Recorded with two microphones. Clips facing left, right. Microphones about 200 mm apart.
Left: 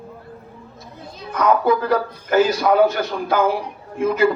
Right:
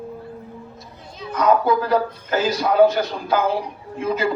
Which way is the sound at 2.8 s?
55° left (ahead or behind).